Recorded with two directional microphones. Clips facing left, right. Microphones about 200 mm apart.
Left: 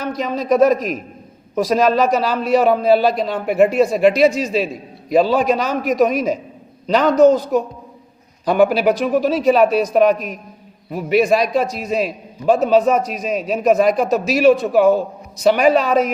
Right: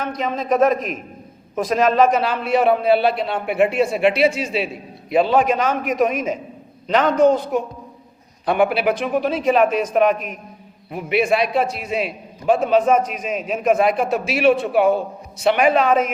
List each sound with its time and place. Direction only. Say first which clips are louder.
0.0 s a man's voice: left 2 dB; 40° left (ahead or behind)